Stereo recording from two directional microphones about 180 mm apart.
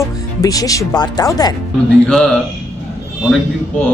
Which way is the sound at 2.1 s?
5° left (ahead or behind).